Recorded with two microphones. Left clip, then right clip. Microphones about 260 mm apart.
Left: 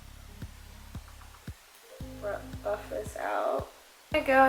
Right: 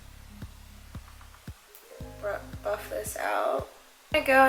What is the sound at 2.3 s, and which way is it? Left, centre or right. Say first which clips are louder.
Speech: right 2 dB; centre.